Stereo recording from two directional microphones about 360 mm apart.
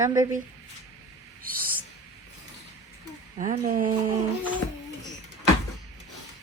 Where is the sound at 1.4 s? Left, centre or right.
Right.